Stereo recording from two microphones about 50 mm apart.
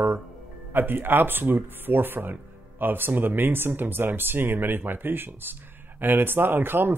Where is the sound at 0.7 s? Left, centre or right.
Right.